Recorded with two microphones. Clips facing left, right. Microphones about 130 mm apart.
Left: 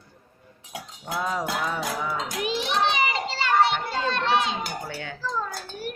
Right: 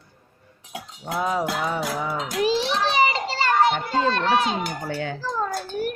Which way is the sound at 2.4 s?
30° right (ahead or behind).